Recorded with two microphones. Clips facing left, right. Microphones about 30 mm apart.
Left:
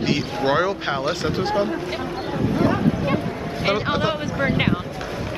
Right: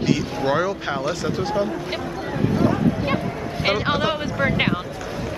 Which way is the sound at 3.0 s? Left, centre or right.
Centre.